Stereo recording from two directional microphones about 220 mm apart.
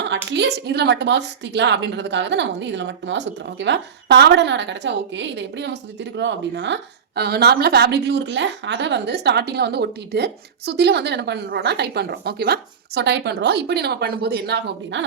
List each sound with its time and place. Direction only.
0.3 s a woman's voice: 50° right (ahead or behind)